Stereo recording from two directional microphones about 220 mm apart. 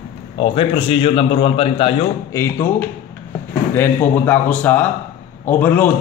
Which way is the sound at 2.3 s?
10° left (ahead or behind).